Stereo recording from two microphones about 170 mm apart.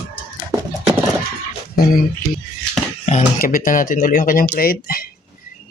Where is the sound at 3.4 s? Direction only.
55° left (ahead or behind).